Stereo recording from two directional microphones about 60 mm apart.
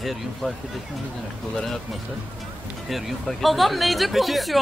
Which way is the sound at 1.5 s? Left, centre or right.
Centre.